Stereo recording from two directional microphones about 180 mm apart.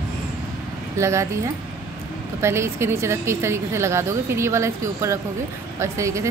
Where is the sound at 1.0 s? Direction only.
15° right (ahead or behind).